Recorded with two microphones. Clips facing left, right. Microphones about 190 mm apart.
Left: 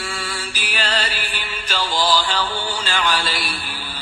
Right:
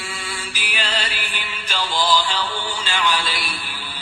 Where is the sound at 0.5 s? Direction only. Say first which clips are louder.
Left 3 dB; 45° left (ahead or behind).